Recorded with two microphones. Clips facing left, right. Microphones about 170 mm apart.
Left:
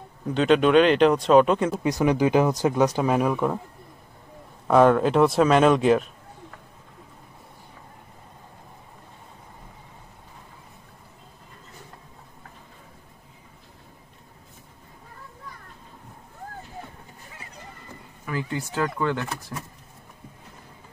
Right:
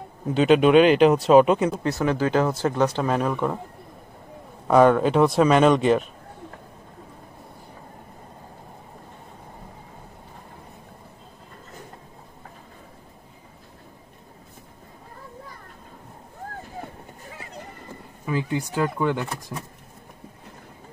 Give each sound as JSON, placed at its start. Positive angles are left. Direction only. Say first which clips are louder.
{"t": 0.3, "sound": "speech", "louder": "right 2 dB", "side_deg": -5}
{"t": 1.8, "sound": "speech", "louder": "left 2 dB", "side_deg": 15}
{"t": 4.6, "sound": "speech", "louder": "right 1 dB", "side_deg": 0}
{"t": 18.2, "sound": "speech", "louder": "right 4 dB", "side_deg": -15}